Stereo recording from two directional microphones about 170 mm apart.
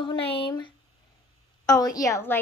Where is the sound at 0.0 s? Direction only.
30° left (ahead or behind).